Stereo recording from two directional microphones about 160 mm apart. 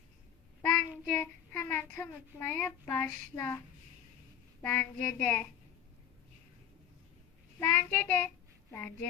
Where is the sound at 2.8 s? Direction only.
15° left (ahead or behind).